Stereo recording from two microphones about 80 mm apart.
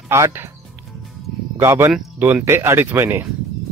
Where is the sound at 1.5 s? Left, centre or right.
Right.